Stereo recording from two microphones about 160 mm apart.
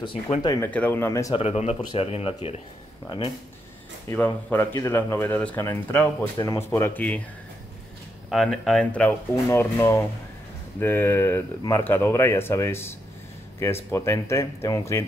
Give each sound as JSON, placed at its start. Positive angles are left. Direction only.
{"t": 0.0, "sound": "speech", "side_deg": 35}
{"t": 0.7, "sound": "speech", "side_deg": 10}
{"t": 1.3, "sound": "speech", "side_deg": 40}
{"t": 4.1, "sound": "speech", "side_deg": 10}
{"t": 8.3, "sound": "speech", "side_deg": 5}